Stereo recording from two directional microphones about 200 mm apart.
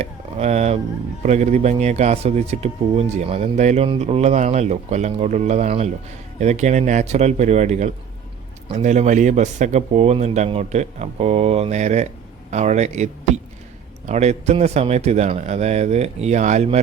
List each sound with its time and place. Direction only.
0.0 s speech: 35° right (ahead or behind)